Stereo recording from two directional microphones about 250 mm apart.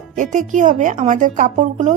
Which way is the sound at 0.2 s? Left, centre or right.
Right.